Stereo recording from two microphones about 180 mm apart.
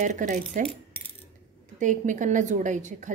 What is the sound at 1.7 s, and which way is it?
A woman's voice, 45° right (ahead or behind).